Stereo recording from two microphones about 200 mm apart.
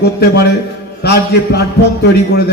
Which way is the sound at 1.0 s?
50° left (ahead or behind).